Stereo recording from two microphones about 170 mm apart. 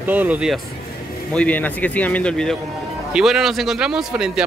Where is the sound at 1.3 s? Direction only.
10° left (ahead or behind).